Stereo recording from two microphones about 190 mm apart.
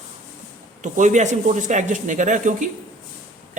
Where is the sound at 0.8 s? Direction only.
40° right (ahead or behind).